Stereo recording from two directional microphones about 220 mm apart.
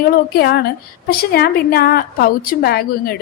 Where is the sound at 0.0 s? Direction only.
45° left (ahead or behind).